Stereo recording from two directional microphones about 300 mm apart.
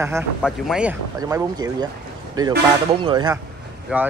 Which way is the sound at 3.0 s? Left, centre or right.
Centre.